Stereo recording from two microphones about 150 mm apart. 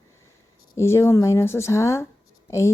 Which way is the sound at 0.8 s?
20° left (ahead or behind).